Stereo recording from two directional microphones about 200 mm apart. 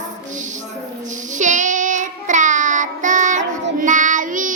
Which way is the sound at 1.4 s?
40° right (ahead or behind).